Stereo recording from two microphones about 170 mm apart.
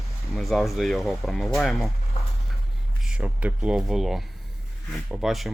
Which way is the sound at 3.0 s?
5° right (ahead or behind).